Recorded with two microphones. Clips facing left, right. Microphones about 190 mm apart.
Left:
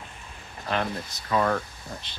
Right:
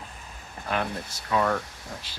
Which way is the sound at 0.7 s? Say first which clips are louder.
Left 1 dB; 5° right (ahead or behind).